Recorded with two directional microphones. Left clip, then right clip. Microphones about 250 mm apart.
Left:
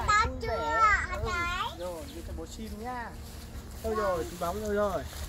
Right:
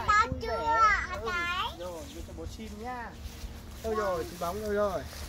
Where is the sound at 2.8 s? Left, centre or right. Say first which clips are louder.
Left 1 dB; centre.